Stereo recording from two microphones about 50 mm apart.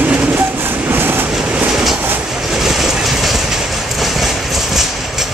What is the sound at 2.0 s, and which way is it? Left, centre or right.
Train, right.